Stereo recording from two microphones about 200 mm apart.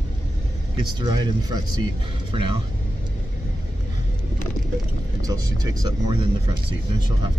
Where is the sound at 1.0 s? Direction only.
20° right (ahead or behind).